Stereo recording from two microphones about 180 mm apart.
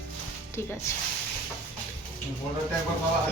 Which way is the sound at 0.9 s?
15° left (ahead or behind).